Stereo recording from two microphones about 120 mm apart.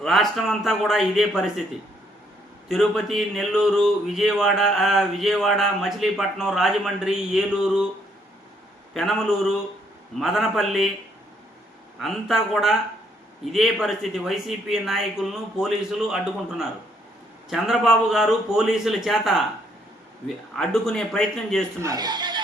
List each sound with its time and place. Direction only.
0.0 s speech: centre (ahead or behind)
2.6 s speech: centre (ahead or behind)
8.9 s speech: centre (ahead or behind)
11.9 s speech: centre (ahead or behind)
21.8 s speech: 30° right (ahead or behind)